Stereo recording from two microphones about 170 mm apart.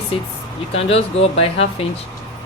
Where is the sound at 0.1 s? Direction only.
35° left (ahead or behind).